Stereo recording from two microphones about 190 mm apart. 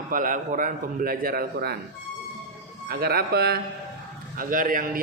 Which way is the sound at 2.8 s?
55° right (ahead or behind).